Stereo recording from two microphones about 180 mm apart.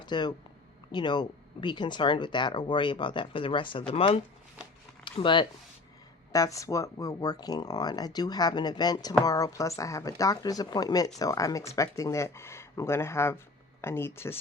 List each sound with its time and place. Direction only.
0.0 s speech: 25° left (ahead or behind)